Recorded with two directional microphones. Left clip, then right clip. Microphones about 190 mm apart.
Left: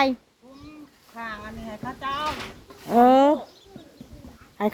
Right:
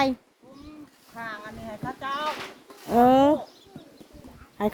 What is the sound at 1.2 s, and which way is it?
Speech, 10° right (ahead or behind).